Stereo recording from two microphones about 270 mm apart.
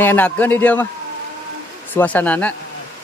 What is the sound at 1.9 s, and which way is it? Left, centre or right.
Speech, centre.